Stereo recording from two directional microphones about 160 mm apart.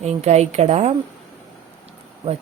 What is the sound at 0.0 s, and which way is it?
Speech, 40° right (ahead or behind).